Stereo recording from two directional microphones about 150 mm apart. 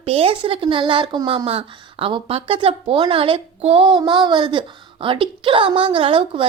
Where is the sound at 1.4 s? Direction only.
40° right (ahead or behind).